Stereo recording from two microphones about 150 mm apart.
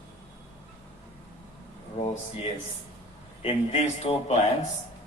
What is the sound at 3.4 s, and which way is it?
A man's voice, 40° left (ahead or behind).